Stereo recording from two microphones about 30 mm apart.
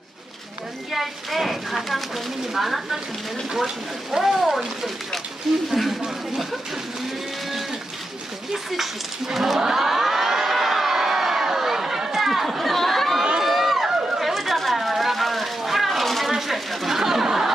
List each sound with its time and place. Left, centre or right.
0.9 s speech: centre
4.2 s speech: centre
8.7 s speech: centre
9.6 s crowd: centre
12.1 s chatter: centre
13.4 s run: centre
14.2 s a sound: centre
16.9 s speech: centre